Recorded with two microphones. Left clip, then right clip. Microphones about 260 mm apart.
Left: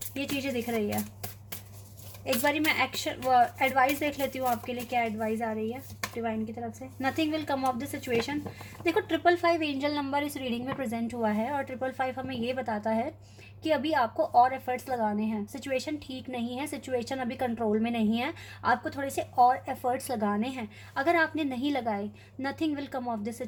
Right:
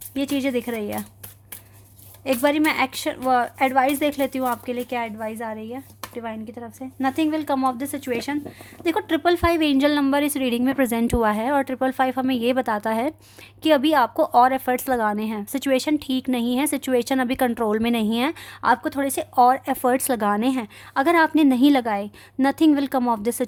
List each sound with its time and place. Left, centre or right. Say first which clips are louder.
0.2 s a woman's voice: right 8 dB; right
2.2 s a woman's voice: right 7 dB; right
7.0 s a woman's voice: right 7 dB; right